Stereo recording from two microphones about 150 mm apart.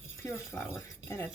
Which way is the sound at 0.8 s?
20° left (ahead or behind).